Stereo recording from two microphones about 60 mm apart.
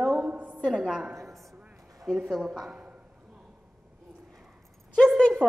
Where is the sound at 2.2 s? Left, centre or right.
Centre.